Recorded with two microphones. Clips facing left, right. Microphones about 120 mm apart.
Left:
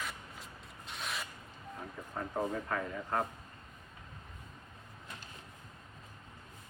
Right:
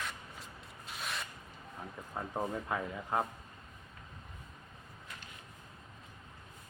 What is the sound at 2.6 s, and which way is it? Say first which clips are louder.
Speech: even; 10° right (ahead or behind).